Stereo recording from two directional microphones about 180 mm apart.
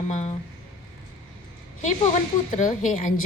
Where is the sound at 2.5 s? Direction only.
45° left (ahead or behind).